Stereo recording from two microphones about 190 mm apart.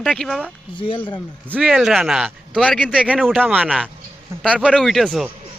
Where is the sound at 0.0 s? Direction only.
Centre (ahead or behind).